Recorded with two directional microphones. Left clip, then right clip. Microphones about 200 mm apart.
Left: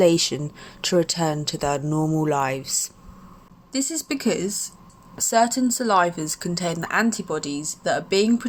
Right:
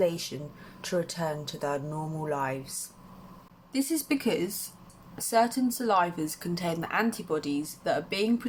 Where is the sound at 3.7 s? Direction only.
30° left (ahead or behind).